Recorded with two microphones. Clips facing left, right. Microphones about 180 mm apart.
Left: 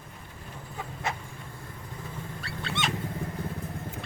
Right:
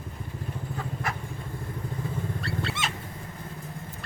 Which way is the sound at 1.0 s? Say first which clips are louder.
Left 2 dB; 25° left (ahead or behind).